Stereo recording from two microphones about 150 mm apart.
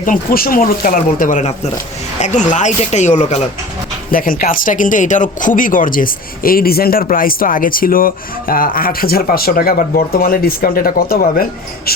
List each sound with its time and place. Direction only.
0.0 s speech: 70° left (ahead or behind); by 3.4 s 50° left (ahead or behind)
4.1 s speech: 70° left (ahead or behind)